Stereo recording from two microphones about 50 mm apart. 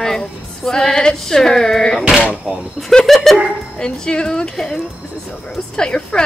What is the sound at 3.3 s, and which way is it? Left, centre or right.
Speech, centre.